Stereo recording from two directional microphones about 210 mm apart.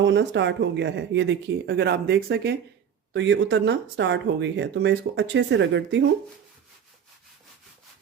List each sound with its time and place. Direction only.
0.0 s speech: 55° right (ahead or behind)